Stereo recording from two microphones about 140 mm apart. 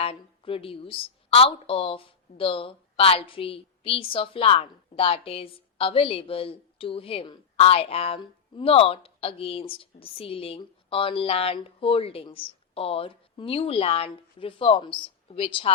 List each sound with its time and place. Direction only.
0.0 s a woman's voice: 40° left (ahead or behind)